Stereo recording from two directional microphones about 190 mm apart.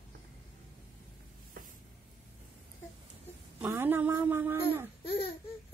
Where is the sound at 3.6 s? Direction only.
10° right (ahead or behind).